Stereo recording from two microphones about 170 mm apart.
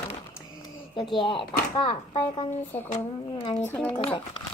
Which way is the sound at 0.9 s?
30° left (ahead or behind).